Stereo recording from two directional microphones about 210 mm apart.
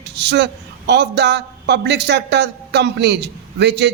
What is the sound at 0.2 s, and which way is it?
Speech, 55° right (ahead or behind).